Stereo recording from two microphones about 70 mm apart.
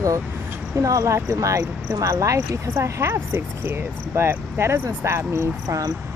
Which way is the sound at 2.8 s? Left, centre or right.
Right.